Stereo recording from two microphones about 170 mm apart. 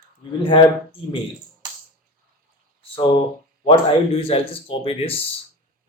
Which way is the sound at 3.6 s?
30° left (ahead or behind).